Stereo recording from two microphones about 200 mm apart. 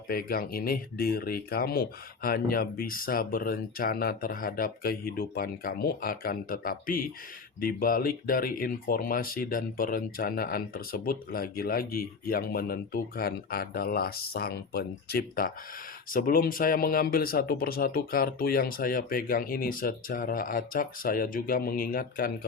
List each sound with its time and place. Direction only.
0.1 s speech: 45° left (ahead or behind)